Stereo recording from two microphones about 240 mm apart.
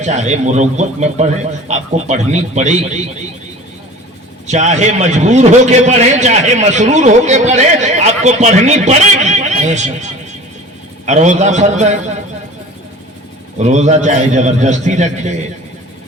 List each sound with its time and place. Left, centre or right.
0.0 s a man's voice: right
4.4 s a man's voice: right
11.0 s a man's voice: right
13.6 s a man's voice: right